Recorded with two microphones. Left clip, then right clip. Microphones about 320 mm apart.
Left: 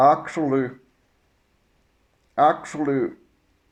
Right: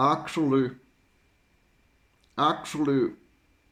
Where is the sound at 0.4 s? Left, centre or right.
Left.